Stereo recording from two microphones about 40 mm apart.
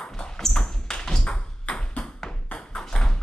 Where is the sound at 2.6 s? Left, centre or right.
Centre.